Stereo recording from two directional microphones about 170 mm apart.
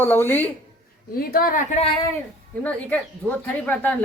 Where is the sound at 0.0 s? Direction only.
10° left (ahead or behind).